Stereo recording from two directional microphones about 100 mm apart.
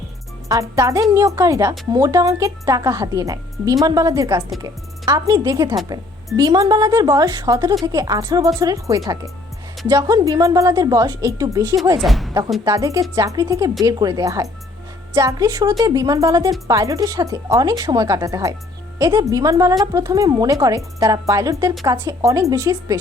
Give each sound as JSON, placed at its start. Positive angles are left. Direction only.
{"t": 0.4, "sound": "speech", "side_deg": -35}
{"t": 11.9, "sound": "a woman's voice", "side_deg": 0}
{"t": 12.6, "sound": "speech", "side_deg": -35}